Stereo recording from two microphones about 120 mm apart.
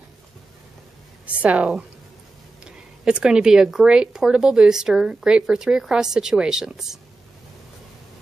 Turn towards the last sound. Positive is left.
turn(degrees=-5)  # may be behind; listen again after turning